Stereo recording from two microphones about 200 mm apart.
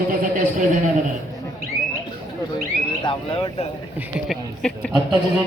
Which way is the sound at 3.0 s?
30° left (ahead or behind).